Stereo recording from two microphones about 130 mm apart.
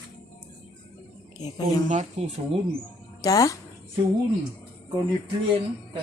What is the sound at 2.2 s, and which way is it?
Speech, 60° right (ahead or behind).